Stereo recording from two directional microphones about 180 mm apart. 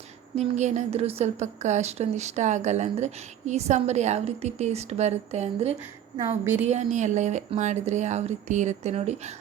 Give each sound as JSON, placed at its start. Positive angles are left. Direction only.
{"t": 0.3, "sound": "a woman's voice", "side_deg": -40}
{"t": 6.4, "sound": "a woman's voice", "side_deg": -10}
{"t": 6.7, "sound": "a woman's voice", "side_deg": -40}